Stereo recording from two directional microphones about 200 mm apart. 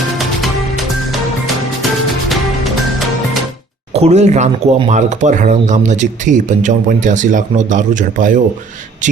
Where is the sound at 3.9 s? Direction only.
30° right (ahead or behind).